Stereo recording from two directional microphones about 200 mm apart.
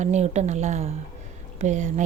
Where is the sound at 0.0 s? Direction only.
35° right (ahead or behind).